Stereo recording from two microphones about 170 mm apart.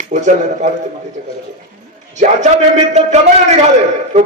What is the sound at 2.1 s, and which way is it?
A man's voice, 45° right (ahead or behind).